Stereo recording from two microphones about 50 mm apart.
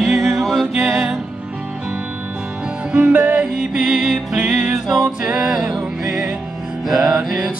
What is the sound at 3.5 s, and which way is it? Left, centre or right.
Music, centre.